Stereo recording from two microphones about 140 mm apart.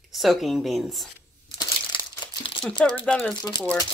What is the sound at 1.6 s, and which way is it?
Crumpling, 35° left (ahead or behind).